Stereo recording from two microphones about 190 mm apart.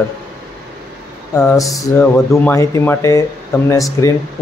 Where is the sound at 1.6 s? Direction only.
15° left (ahead or behind).